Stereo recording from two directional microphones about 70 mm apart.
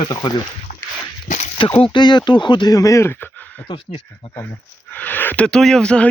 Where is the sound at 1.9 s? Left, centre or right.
Left.